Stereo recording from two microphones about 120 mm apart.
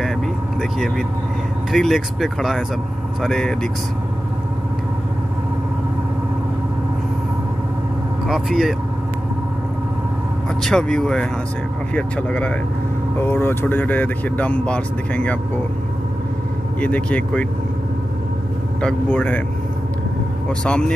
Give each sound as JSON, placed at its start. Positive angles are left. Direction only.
{"t": 0.6, "sound": "speech", "side_deg": 0}
{"t": 8.3, "sound": "speech", "side_deg": 0}
{"t": 10.6, "sound": "speech", "side_deg": 5}
{"t": 16.8, "sound": "speech", "side_deg": 10}
{"t": 18.8, "sound": "speech", "side_deg": 10}
{"t": 20.6, "sound": "speech", "side_deg": 5}